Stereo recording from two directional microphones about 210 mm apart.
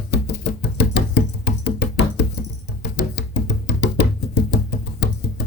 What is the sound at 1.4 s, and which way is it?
Music, 55° left (ahead or behind).